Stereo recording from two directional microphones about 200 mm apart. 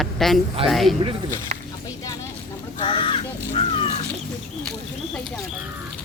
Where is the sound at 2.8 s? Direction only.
25° left (ahead or behind).